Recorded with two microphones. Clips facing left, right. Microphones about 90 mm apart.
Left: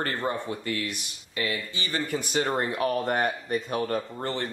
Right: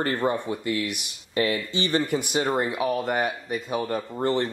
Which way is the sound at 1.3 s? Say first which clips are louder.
Right 6 dB; 30° right (ahead or behind).